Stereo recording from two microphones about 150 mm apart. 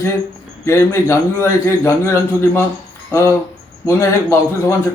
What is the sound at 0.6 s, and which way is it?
A man's voice, 20° left (ahead or behind).